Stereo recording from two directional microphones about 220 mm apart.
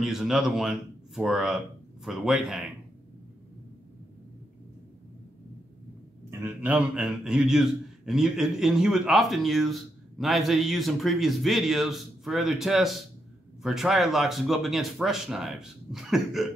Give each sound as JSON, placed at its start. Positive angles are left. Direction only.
{"t": 0.0, "sound": "a man's voice", "side_deg": 0}
{"t": 6.4, "sound": "a man's voice", "side_deg": -5}